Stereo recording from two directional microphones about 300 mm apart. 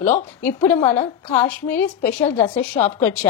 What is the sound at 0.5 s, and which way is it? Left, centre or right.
A woman's voice, centre.